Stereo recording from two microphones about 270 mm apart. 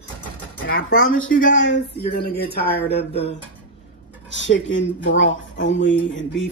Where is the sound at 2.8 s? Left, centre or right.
Left.